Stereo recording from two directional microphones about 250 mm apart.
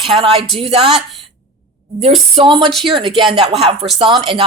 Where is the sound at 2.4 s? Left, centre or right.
Centre.